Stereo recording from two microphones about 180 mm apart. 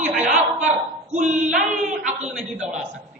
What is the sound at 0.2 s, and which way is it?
Chuckle, 40° right (ahead or behind).